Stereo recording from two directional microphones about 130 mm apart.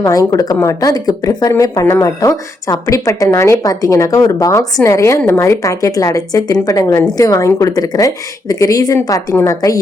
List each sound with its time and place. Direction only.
0.0 s speech: 25° left (ahead or behind)